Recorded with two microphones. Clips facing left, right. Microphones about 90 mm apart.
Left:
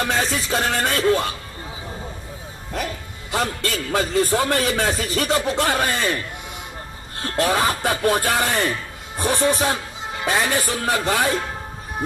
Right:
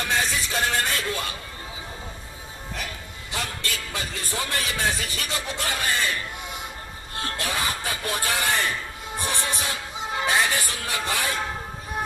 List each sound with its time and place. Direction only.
0.0 s speech: 40° left (ahead or behind)
3.3 s speech: 40° left (ahead or behind)
7.2 s speech: 45° left (ahead or behind)